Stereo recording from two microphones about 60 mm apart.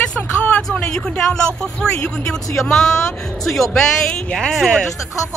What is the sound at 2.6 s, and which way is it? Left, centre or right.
Speech, centre.